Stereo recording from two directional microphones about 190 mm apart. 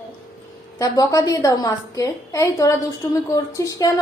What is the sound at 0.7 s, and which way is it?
A woman's voice, 20° left (ahead or behind).